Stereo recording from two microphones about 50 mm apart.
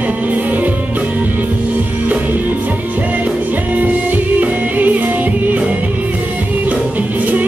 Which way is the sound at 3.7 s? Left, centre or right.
Right.